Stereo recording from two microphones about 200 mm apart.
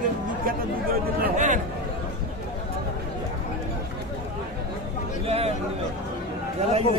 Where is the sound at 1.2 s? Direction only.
40° right (ahead or behind).